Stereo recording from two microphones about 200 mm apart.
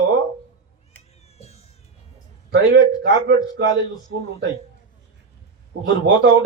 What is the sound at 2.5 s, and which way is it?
A man's voice, 65° right (ahead or behind).